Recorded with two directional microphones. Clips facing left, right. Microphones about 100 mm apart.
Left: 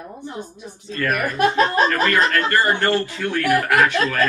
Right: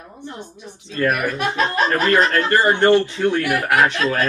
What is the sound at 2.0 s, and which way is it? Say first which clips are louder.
Speech: right 2 dB; 25° right (ahead or behind).